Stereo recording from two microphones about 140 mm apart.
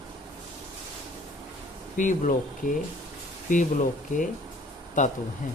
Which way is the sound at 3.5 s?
65° left (ahead or behind).